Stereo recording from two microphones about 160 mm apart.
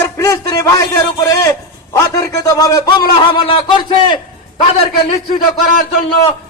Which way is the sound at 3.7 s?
35° left (ahead or behind).